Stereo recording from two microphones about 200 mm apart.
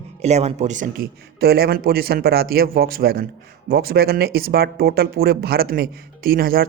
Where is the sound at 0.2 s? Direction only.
35° right (ahead or behind).